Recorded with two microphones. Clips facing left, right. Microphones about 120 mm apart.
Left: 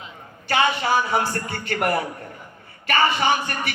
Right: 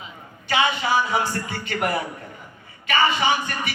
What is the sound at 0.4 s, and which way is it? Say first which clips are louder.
A man's voice: left 1 dB; 50° left (ahead or behind).